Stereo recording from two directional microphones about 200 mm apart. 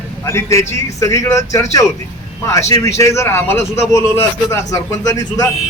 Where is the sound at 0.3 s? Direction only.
15° left (ahead or behind).